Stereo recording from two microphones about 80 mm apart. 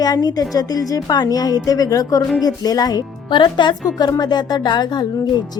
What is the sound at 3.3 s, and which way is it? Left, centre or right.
A woman's voice, left.